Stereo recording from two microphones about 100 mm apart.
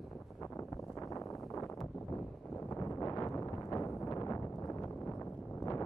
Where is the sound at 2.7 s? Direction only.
35° left (ahead or behind).